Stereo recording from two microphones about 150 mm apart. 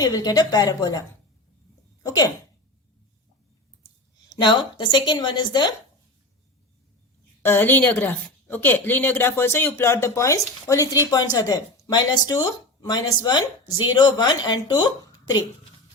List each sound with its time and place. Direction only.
0.0 s speech: 25° left (ahead or behind)
2.0 s speech: 25° left (ahead or behind)
4.3 s a woman's voice: 30° left (ahead or behind)
7.4 s a woman's voice: 15° left (ahead or behind)